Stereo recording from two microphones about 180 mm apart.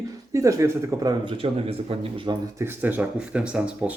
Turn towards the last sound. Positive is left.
turn(degrees=-5)  # may be behind; listen again after turning